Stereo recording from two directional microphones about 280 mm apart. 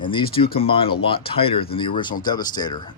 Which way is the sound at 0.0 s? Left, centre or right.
Centre.